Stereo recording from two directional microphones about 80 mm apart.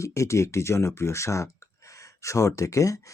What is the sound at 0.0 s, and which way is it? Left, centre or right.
Speech, left.